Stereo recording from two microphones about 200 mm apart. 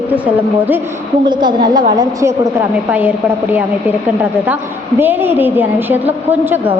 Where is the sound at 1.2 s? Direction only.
20° right (ahead or behind).